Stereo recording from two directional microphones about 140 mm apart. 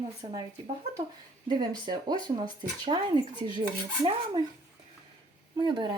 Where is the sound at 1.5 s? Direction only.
30° right (ahead or behind).